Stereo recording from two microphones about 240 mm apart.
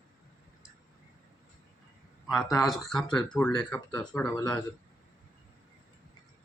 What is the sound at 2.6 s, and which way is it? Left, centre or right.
Speech, centre.